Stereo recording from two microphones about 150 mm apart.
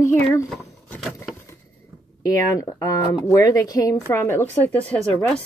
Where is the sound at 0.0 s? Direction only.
20° left (ahead or behind).